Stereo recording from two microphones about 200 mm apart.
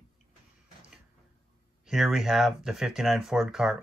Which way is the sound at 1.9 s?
Centre (ahead or behind).